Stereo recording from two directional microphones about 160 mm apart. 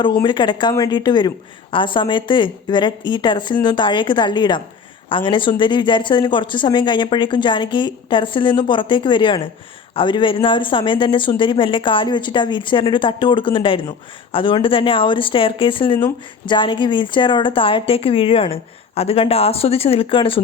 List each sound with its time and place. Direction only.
0.0 s speech: 30° left (ahead or behind)